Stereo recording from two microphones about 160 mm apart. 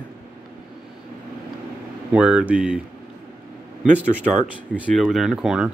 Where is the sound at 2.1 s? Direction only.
5° right (ahead or behind).